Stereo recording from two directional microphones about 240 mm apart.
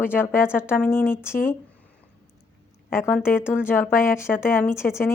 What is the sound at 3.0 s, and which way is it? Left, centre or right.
Speech, centre.